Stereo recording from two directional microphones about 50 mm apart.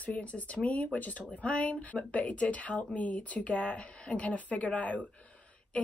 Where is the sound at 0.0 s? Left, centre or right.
Left.